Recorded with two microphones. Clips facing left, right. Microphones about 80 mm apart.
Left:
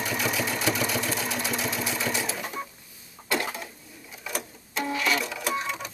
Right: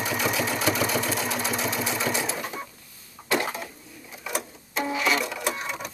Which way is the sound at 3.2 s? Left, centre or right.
Centre.